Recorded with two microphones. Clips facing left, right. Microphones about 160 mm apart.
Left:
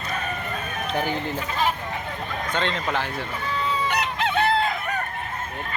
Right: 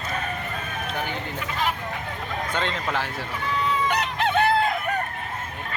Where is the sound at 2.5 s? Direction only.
5° right (ahead or behind).